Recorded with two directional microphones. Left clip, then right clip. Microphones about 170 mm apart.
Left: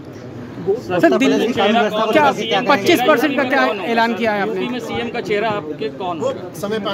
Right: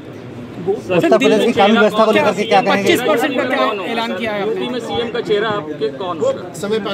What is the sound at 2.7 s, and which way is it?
Speech, 65° left (ahead or behind).